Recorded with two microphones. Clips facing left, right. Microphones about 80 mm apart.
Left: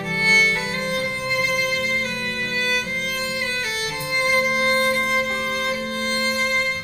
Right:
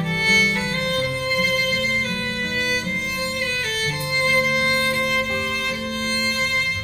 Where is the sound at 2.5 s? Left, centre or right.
Centre.